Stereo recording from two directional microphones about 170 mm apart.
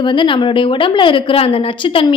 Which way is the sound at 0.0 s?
25° left (ahead or behind).